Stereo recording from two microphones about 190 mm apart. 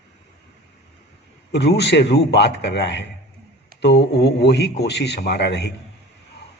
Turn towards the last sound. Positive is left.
turn(degrees=65)  # may be behind; listen again after turning